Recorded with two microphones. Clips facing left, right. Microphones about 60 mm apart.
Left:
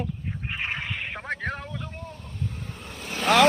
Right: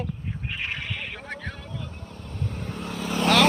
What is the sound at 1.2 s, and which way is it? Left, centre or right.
Vehicle, left.